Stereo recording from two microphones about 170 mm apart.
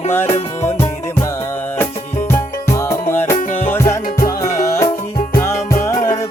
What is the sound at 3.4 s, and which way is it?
Music, 50° left (ahead or behind).